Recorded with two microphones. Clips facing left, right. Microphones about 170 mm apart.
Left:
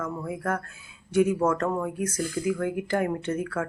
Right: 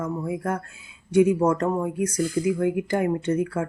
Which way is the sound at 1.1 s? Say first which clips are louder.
Right 4 dB; 15° right (ahead or behind).